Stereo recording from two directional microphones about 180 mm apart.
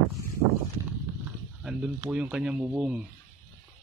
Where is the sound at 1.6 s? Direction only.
5° right (ahead or behind).